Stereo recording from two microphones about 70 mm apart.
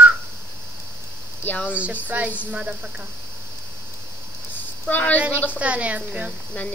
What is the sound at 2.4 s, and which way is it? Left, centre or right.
Speech, centre.